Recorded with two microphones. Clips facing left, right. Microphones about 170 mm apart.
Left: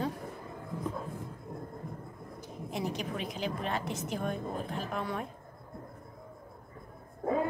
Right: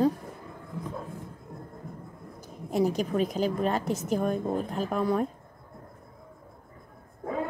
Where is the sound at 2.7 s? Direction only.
40° right (ahead or behind).